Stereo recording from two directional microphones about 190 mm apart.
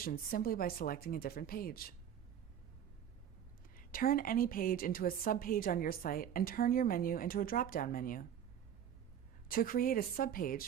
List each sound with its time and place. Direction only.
0.0 s a woman's voice: 50° left (ahead or behind)
3.8 s a woman's voice: 50° left (ahead or behind)
9.5 s a woman's voice: 45° left (ahead or behind)